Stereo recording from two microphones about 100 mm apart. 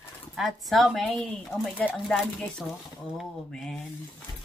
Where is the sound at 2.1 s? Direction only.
5° left (ahead or behind).